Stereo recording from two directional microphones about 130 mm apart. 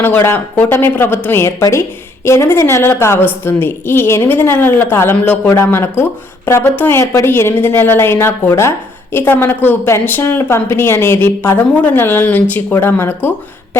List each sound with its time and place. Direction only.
0.0 s a woman's voice: 15° left (ahead or behind)